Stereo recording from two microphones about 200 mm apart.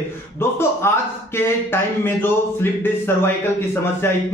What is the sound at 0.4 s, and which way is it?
Speech, 10° left (ahead or behind).